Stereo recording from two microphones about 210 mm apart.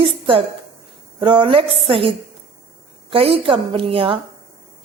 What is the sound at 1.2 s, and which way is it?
A woman's voice, 20° right (ahead or behind).